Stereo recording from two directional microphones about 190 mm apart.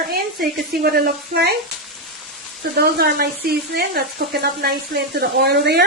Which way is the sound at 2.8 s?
55° right (ahead or behind).